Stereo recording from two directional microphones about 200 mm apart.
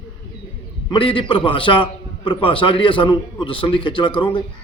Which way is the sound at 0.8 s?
25° left (ahead or behind).